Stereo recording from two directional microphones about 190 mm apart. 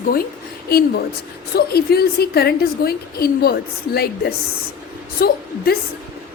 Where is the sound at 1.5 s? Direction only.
55° left (ahead or behind).